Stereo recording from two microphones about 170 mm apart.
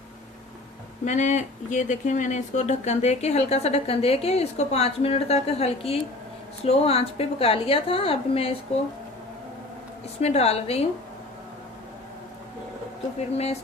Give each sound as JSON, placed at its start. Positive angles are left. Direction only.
{"t": 1.0, "sound": "speech", "side_deg": 45}
{"t": 10.2, "sound": "speech", "side_deg": 40}
{"t": 13.1, "sound": "speech", "side_deg": 40}